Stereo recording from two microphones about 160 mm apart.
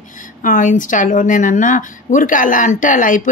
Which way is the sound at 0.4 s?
55° left (ahead or behind).